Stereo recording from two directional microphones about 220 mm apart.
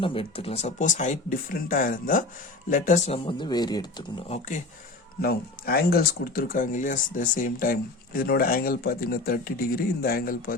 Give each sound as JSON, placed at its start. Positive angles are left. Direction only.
{"t": 0.0, "sound": "speech", "side_deg": 25}
{"t": 5.2, "sound": "speech", "side_deg": 45}